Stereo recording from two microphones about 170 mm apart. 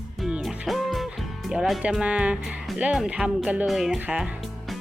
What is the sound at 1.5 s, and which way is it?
Speech, centre (ahead or behind).